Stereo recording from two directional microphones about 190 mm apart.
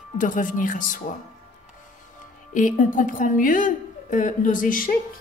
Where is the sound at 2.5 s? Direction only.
45° left (ahead or behind).